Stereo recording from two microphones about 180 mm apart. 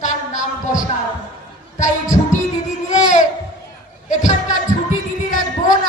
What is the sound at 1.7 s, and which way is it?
Music, 45° left (ahead or behind).